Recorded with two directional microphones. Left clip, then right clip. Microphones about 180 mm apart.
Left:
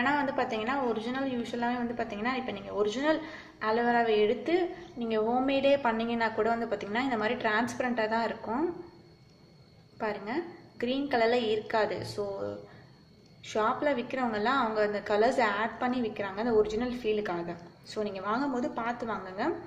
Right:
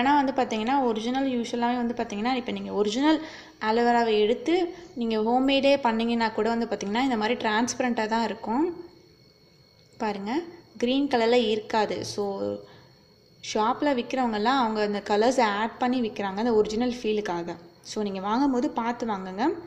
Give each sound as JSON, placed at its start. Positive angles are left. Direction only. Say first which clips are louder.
{"t": 0.0, "sound": "a woman's voice", "louder": "right 6 dB", "side_deg": -40}
{"t": 9.9, "sound": "a woman's voice", "louder": "right 4 dB", "side_deg": -40}
{"t": 13.5, "sound": "a woman's voice", "louder": "right 3 dB", "side_deg": -40}